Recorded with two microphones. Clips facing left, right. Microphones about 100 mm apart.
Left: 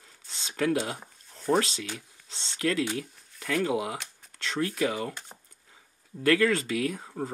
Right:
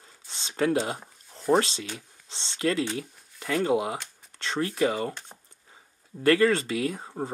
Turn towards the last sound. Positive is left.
turn(degrees=-30)  # may be behind; listen again after turning